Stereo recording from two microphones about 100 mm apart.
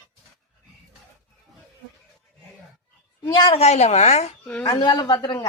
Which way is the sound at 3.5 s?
90° left.